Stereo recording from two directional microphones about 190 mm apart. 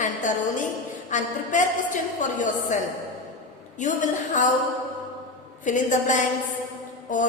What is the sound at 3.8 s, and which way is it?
Speech, 40° left (ahead or behind).